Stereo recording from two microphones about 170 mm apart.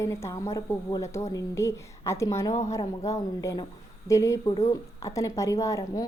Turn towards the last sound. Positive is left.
turn(degrees=20)  # may be behind; listen again after turning